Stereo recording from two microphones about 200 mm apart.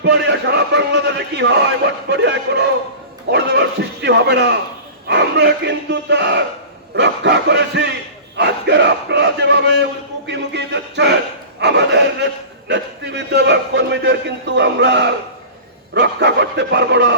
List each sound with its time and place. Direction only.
0.0 s a man's voice: 60° right (ahead or behind)
4.0 s a man's voice: 60° right (ahead or behind)
8.4 s battle cry: 55° right (ahead or behind)
10.2 s a man's voice: 60° right (ahead or behind)